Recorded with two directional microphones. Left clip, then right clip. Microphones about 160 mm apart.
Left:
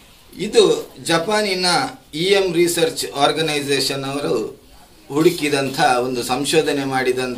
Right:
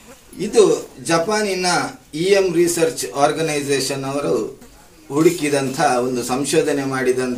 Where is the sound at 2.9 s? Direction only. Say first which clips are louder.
Even; centre (ahead or behind).